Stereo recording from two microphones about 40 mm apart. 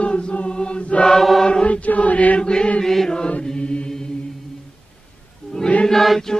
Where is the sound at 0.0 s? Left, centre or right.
Left.